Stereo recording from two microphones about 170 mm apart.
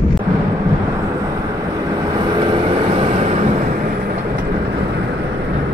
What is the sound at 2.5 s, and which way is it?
Vehicle, 35° right (ahead or behind).